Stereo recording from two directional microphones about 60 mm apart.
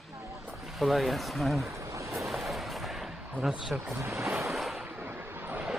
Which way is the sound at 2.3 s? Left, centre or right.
Centre.